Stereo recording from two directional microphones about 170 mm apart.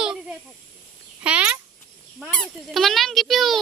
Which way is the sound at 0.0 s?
5° right (ahead or behind).